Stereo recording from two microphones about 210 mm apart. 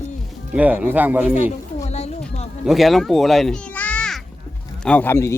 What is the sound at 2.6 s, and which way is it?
A child's voice, centre (ahead or behind).